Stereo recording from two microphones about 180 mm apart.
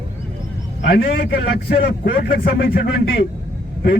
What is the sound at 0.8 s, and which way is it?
A man's voice, 65° left (ahead or behind).